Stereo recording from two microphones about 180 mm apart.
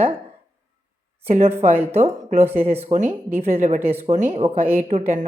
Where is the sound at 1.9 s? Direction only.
35° right (ahead or behind).